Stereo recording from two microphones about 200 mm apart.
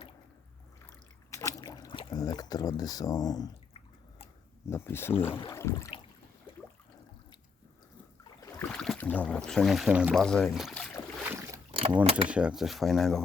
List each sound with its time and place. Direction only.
1.3 s a sound: 15° left (ahead or behind)
4.6 s speech: 10° left (ahead or behind)
8.4 s speech: 15° left (ahead or behind)
11.3 s boat: 15° right (ahead or behind)
11.7 s mechanisms: 25° right (ahead or behind)
12.3 s speech: 5° right (ahead or behind)